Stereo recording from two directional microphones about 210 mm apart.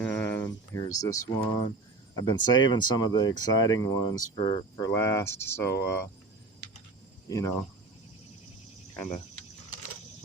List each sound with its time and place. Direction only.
0.0 s a sound: 10° left (ahead or behind)
2.1 s speech: 20° left (ahead or behind)
7.3 s speech: 15° left (ahead or behind)